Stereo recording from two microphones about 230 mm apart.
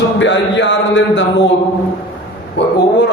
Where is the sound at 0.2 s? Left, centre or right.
Left.